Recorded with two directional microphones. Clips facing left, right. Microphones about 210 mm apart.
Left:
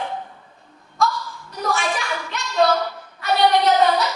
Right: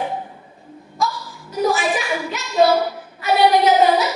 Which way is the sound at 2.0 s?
15° right (ahead or behind).